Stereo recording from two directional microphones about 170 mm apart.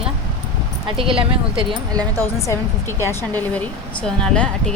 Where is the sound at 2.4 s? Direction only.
15° left (ahead or behind).